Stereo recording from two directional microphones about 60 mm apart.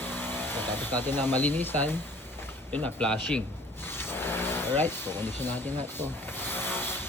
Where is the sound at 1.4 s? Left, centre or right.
Left.